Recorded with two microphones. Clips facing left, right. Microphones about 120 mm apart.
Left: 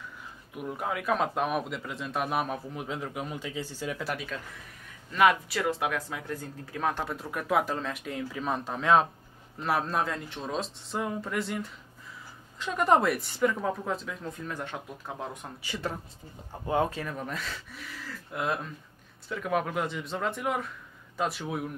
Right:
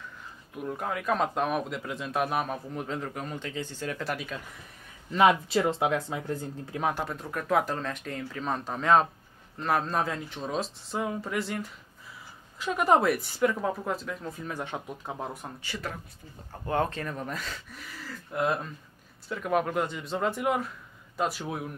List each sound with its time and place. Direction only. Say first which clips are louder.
0.6 s a man's voice: even; 5° left (ahead or behind)
5.1 s speech: right 2 dB; 25° right (ahead or behind)
6.8 s speech: right 1 dB; 15° right (ahead or behind)
7.1 s a man's voice: right 1 dB; 5° left (ahead or behind)
14.5 s speech: right 2 dB; 15° right (ahead or behind)
15.6 s a man's voice: left 5 dB; 20° left (ahead or behind); by 21.7 s centre (ahead or behind)